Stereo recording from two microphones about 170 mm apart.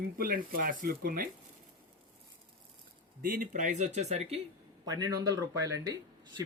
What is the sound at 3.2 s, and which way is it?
Speech, 55° right (ahead or behind).